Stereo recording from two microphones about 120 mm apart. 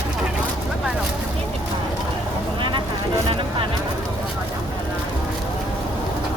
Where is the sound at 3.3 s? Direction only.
50° right (ahead or behind).